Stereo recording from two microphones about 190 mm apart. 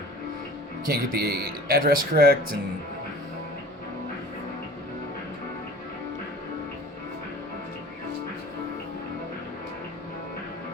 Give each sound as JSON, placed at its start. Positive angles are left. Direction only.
{"t": 0.9, "sound": "speech", "side_deg": -55}